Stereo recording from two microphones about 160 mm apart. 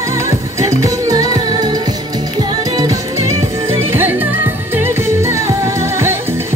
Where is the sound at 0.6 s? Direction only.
20° right (ahead or behind).